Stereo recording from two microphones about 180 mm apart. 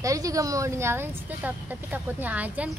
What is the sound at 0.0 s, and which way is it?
A woman's voice, 20° right (ahead or behind).